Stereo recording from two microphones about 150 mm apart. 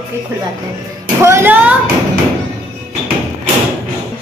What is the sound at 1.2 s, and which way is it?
Speech, 15° right (ahead or behind).